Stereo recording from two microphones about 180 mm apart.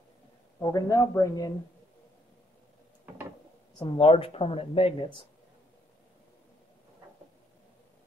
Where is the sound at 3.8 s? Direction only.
30° left (ahead or behind).